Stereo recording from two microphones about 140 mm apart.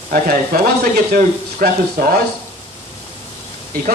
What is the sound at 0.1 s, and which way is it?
Speech, 90° right.